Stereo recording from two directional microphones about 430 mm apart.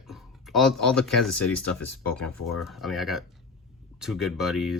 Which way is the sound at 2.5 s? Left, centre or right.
Centre.